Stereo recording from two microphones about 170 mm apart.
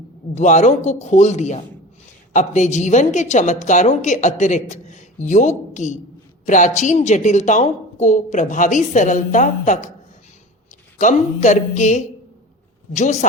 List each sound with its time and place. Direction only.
0.3 s a woman's voice: 45° left (ahead or behind)
10.9 s a woman's voice: 45° left (ahead or behind)